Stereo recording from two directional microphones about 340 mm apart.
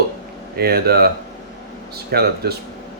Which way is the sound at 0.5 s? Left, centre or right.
Right.